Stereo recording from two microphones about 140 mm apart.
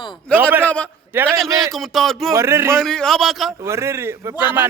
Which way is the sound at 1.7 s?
Centre (ahead or behind).